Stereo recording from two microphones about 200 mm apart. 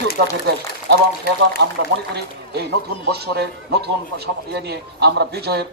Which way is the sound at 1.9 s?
55° right (ahead or behind).